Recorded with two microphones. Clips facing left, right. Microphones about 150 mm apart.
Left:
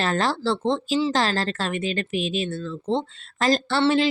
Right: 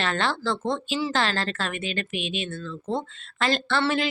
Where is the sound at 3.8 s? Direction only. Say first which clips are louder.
Left 7 dB; 30° left (ahead or behind).